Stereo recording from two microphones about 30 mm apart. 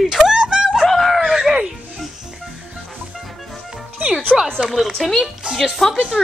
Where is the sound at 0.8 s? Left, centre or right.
Centre.